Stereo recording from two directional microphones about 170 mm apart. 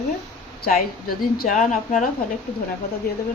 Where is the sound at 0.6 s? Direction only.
60° left (ahead or behind).